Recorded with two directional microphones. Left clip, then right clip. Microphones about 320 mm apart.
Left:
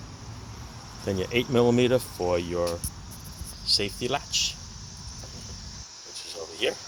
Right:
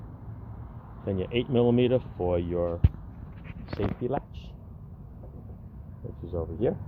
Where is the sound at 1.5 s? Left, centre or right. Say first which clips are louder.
Left 2 dB; centre.